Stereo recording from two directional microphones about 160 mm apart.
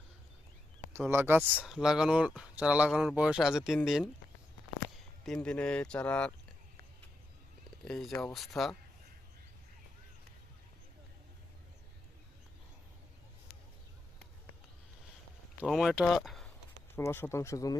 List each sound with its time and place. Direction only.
0.9 s speech: 15° right (ahead or behind)
5.2 s speech: 5° left (ahead or behind)
7.9 s speech: 5° left (ahead or behind)
15.6 s speech: centre (ahead or behind)
16.9 s speech: 15° left (ahead or behind)